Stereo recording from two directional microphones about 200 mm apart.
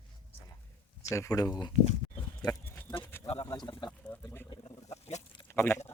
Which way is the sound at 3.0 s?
10° left (ahead or behind).